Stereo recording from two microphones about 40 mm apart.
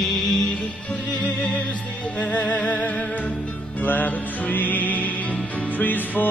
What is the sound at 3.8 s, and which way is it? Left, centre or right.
Music, left.